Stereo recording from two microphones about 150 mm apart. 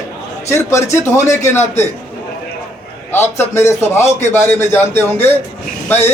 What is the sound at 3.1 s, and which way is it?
A man's voice, 15° left (ahead or behind).